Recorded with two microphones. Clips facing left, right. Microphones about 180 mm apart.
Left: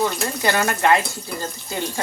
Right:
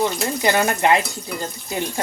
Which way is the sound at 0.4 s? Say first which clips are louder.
Right 1 dB; 20° right (ahead or behind).